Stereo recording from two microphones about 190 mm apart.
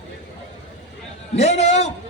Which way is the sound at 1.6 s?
35° left (ahead or behind).